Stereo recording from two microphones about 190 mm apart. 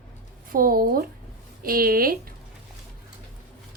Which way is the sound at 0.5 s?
50° right (ahead or behind).